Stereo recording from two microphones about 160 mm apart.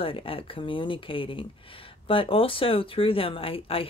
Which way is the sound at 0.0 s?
35° left (ahead or behind).